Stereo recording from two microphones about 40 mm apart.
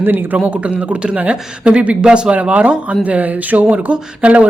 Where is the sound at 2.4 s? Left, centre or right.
Right.